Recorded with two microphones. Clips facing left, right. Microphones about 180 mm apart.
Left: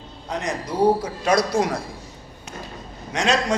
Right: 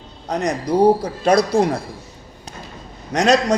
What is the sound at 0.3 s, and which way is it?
Speech, 40° right (ahead or behind).